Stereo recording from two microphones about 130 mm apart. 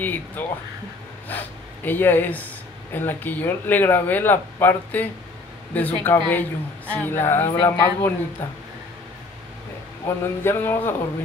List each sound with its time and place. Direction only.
0.0 s a man's voice: 15° left (ahead or behind)
10.0 s speech: 20° left (ahead or behind)